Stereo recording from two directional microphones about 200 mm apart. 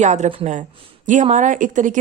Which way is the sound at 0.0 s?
35° right (ahead or behind).